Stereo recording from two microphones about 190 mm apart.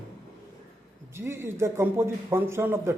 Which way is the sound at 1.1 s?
15° right (ahead or behind).